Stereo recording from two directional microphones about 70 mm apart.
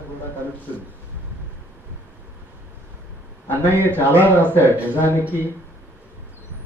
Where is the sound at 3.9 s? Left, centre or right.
Right.